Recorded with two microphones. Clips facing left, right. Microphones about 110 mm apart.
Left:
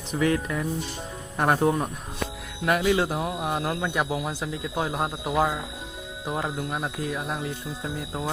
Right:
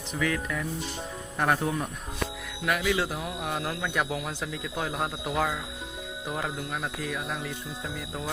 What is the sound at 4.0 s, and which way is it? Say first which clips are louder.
Mantra: left 3 dB; 20° left (ahead or behind).